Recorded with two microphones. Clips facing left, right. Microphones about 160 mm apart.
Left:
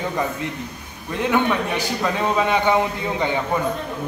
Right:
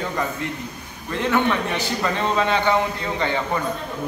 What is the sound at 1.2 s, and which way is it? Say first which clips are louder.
A man's voice: left 1 dB; 10° left (ahead or behind).